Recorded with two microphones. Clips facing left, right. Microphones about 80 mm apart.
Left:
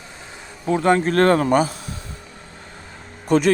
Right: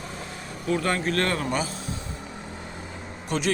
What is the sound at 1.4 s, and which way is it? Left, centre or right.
Speech, left.